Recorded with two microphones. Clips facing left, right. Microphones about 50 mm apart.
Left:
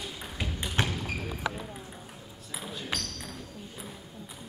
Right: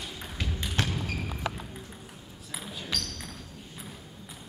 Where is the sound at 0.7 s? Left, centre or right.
Centre.